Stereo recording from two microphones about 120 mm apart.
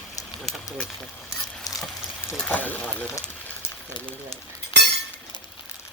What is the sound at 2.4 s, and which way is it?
Speech, 15° left (ahead or behind).